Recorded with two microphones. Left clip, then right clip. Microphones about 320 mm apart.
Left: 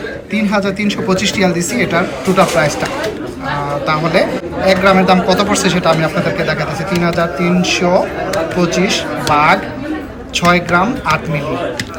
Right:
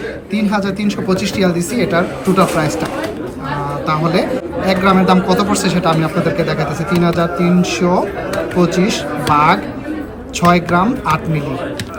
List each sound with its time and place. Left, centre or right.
0.3 s speech: centre
3.8 s speech: centre
8.3 s chatter: centre
9.3 s speech: centre